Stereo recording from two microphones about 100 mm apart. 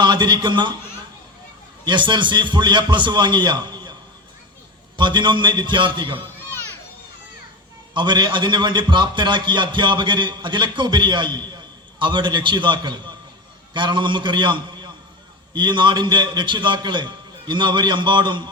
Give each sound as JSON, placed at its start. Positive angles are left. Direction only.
{"t": 0.0, "sound": "a man's voice", "side_deg": -50}
{"t": 1.8, "sound": "a man's voice", "side_deg": -50}
{"t": 4.9, "sound": "a man's voice", "side_deg": -50}
{"t": 6.2, "sound": "a sound", "side_deg": 20}
{"t": 7.9, "sound": "a man's voice", "side_deg": -50}